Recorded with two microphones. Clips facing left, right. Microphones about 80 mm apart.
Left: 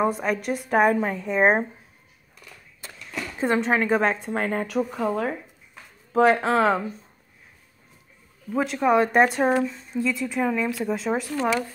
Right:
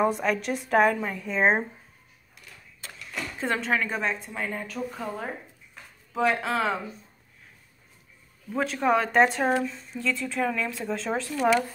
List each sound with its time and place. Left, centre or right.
0.0 s a woman's voice: centre
0.9 s a woman's voice: left
3.3 s a woman's voice: centre
3.8 s speech: left
4.2 s speech: left
6.1 s speech: left
8.5 s speech: centre
11.3 s a woman's voice: centre